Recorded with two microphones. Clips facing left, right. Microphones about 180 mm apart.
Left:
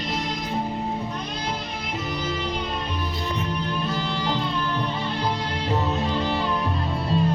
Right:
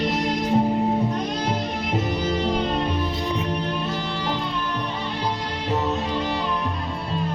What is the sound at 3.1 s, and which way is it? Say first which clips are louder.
Music: right 3 dB; 15° right (ahead or behind).